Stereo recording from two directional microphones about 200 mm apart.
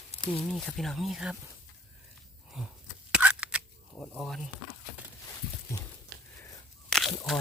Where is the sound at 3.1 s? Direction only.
5° right (ahead or behind).